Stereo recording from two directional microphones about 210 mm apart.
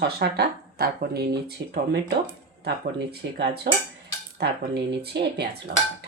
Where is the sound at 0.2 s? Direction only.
50° right (ahead or behind).